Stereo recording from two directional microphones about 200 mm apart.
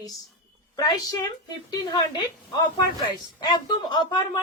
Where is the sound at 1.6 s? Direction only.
20° left (ahead or behind).